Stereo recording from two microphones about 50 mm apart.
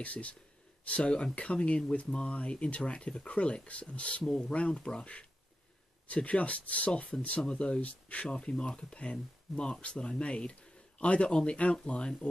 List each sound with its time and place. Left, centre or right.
0.0 s speech: left
4.2 s speech: centre